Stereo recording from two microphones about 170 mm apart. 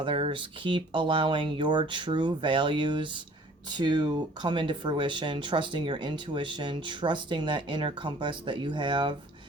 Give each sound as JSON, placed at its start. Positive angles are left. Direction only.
{"t": 0.0, "sound": "speech", "side_deg": -30}